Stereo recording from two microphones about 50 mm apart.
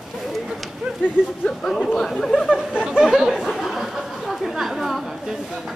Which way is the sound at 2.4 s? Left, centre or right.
Centre.